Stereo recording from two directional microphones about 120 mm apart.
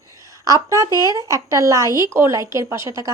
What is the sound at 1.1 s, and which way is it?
A woman's voice, 25° right (ahead or behind).